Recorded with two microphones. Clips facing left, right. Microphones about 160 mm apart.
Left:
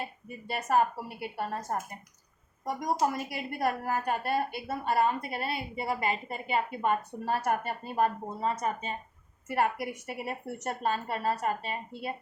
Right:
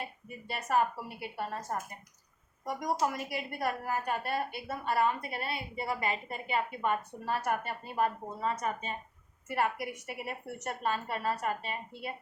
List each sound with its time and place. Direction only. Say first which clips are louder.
0.4 s a woman's voice: left 3 dB; 40° left (ahead or behind)